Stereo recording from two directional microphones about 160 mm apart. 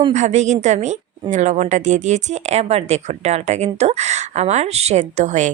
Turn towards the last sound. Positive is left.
turn(degrees=-50)  # may be behind; listen again after turning